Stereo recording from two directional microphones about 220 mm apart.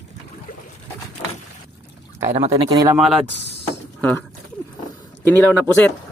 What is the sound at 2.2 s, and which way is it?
Speech, 30° right (ahead or behind).